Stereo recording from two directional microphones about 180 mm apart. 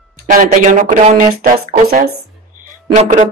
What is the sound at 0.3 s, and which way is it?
Speech, 45° right (ahead or behind).